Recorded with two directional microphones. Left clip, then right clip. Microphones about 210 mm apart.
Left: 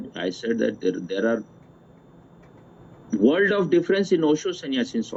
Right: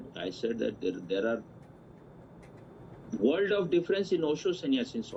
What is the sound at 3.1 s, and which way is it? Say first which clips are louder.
Speech: left 8 dB; 45° left (ahead or behind).